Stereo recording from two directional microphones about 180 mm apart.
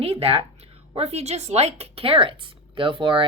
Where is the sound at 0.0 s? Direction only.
35° right (ahead or behind).